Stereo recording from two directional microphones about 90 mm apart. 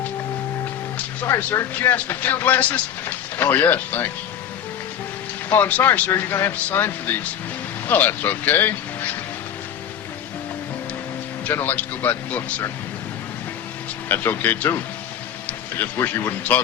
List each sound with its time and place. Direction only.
1.5 s speech: 25° left (ahead or behind)
5.5 s speech: 20° left (ahead or behind)
11.4 s speech: 20° left (ahead or behind)
14.1 s speech: 25° left (ahead or behind)
16.0 s speech: 25° left (ahead or behind)